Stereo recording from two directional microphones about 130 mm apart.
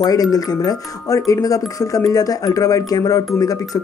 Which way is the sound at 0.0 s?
30° left (ahead or behind).